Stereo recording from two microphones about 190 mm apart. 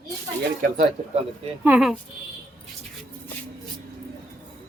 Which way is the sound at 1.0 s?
40° right (ahead or behind).